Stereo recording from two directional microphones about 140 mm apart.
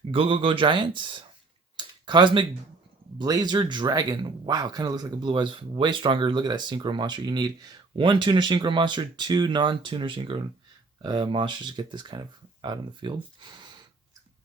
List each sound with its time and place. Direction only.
0.1 s speech: 40° right (ahead or behind)
1.7 s a sound: 35° right (ahead or behind)
3.2 s speech: 30° right (ahead or behind)